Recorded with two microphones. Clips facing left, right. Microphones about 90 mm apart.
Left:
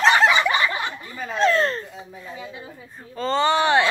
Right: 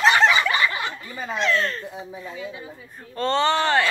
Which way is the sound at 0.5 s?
20° left (ahead or behind).